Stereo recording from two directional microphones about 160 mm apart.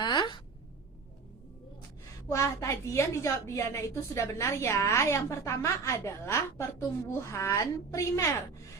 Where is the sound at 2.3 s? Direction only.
20° left (ahead or behind).